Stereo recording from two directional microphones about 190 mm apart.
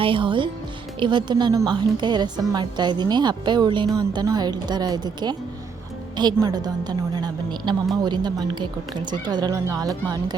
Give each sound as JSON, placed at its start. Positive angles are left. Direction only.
{"t": 0.0, "sound": "a woman's voice", "side_deg": -25}